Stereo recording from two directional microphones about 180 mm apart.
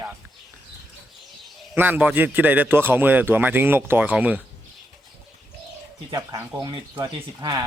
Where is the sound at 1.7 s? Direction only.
10° right (ahead or behind).